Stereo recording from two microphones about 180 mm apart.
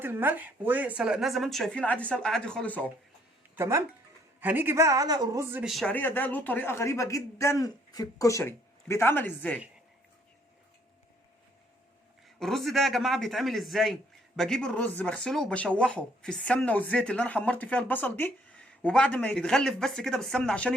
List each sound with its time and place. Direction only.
0.0 s a man's voice: 10° right (ahead or behind); by 2.9 s 10° left (ahead or behind)
3.5 s a man's voice: 15° right (ahead or behind)
5.6 s a man's voice: centre (ahead or behind)
12.4 s a man's voice: centre (ahead or behind)